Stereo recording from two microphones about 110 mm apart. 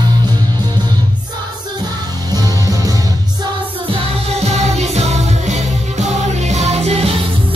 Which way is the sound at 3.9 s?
70° right (ahead or behind).